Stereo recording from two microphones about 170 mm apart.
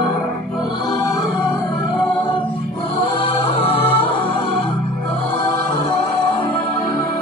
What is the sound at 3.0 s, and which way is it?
Music, 30° left (ahead or behind).